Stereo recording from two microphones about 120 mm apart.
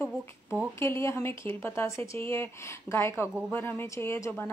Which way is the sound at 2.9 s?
5° left (ahead or behind).